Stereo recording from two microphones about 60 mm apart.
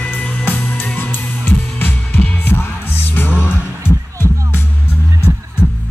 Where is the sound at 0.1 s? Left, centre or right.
Left.